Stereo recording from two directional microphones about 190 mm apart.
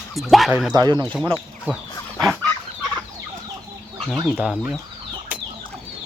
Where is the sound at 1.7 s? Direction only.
10° right (ahead or behind).